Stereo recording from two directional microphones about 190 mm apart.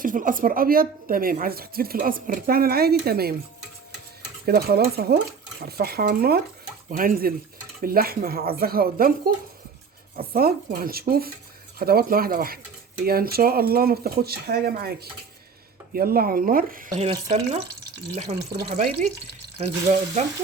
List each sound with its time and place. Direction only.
0.0 s speech: 45° right (ahead or behind)
4.4 s speech: 55° right (ahead or behind)
18.1 s speech: 35° right (ahead or behind)